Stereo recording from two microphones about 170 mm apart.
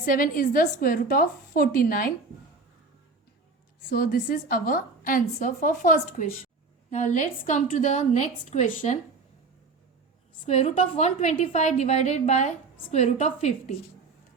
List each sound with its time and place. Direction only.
0.0 s a woman's voice: 55° left (ahead or behind)
3.9 s a woman's voice: 60° left (ahead or behind)
10.4 s a woman's voice: 40° left (ahead or behind)